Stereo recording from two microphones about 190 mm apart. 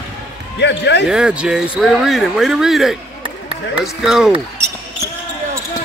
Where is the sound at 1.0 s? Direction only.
5° right (ahead or behind).